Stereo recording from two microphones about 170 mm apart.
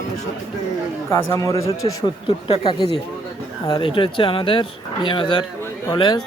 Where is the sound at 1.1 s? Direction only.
15° left (ahead or behind).